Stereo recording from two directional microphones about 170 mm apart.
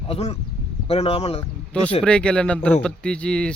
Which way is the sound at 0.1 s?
35° left (ahead or behind).